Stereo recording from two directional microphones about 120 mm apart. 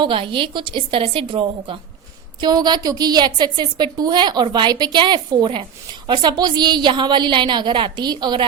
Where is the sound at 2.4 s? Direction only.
35° right (ahead or behind).